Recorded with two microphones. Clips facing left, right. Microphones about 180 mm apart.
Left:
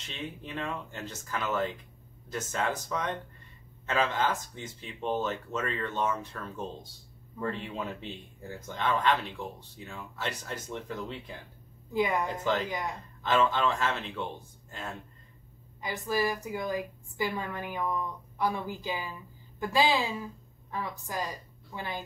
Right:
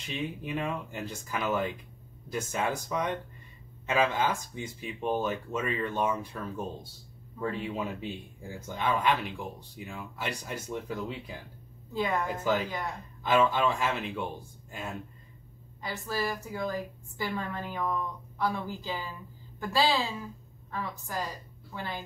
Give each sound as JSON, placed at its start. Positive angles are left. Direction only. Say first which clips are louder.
{"t": 0.0, "sound": "speech", "louder": "right 5 dB", "side_deg": -10}
{"t": 11.9, "sound": "a woman's voice", "louder": "left 2 dB", "side_deg": 15}
{"t": 12.3, "sound": "speech", "louder": "right 1 dB", "side_deg": -10}
{"t": 15.8, "sound": "a woman's voice", "louder": "left 3 dB", "side_deg": 15}